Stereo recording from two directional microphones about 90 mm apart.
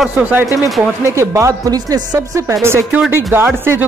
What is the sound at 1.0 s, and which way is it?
Speech, 35° right (ahead or behind).